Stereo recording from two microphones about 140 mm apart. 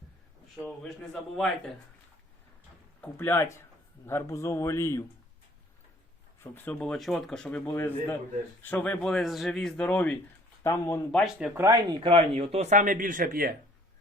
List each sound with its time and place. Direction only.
0.8 s speech: centre (ahead or behind)
3.0 s a man's voice: 15° left (ahead or behind)
6.4 s a man's voice: 15° left (ahead or behind)
10.6 s a man's voice: 20° left (ahead or behind)
11.2 s speech: 5° right (ahead or behind)
11.5 s speech: 20° right (ahead or behind)
11.9 s speech: 40° right (ahead or behind); by 13.5 s 85° right